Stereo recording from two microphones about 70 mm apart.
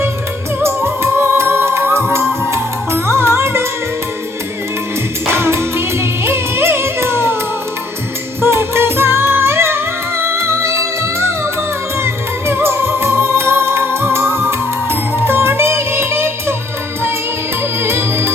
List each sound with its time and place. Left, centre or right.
0.6 s music: right
5.3 s music: right
8.4 s music: right
17.8 s music: right